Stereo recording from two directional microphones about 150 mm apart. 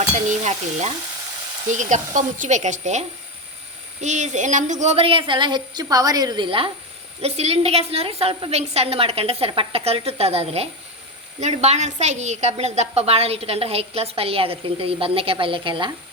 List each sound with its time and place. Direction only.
0.3 s a woman's voice: 50° right (ahead or behind)
4.0 s a woman's voice: 50° right (ahead or behind); by 6.7 s 35° right (ahead or behind)
7.2 s a woman's voice: 45° right (ahead or behind)